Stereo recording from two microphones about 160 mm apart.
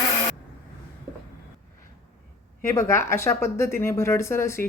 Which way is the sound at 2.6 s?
15° left (ahead or behind).